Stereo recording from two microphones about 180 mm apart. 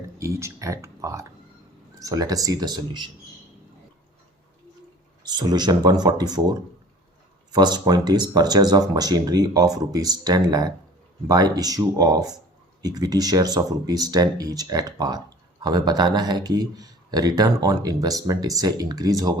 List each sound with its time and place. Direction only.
0.2 s speech: 15° right (ahead or behind)
5.2 s speech: 20° right (ahead or behind)